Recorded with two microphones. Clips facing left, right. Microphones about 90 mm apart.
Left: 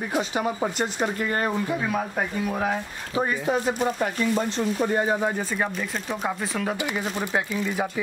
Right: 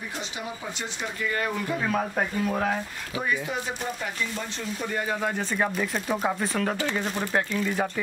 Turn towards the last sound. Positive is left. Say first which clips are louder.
# even
turn(degrees=10)  # may be behind; listen again after turning